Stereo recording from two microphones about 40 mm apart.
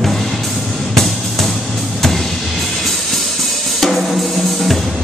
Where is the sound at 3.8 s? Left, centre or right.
Centre.